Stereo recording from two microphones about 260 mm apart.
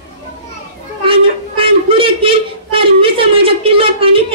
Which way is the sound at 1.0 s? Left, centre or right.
Right.